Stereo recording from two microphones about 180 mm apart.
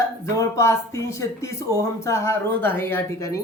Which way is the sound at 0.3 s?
15° left (ahead or behind).